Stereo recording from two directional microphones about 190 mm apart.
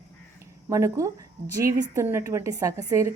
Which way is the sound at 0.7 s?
15° right (ahead or behind).